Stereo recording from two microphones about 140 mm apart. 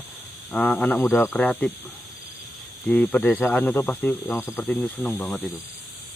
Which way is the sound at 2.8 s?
10° left (ahead or behind).